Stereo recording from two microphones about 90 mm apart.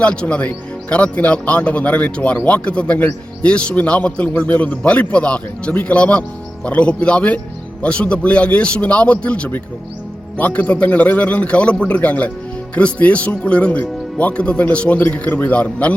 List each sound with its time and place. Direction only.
0.0 s a man's voice: 10° left (ahead or behind)